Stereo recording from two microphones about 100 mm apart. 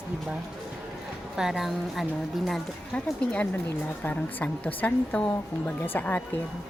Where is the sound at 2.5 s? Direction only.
10° left (ahead or behind).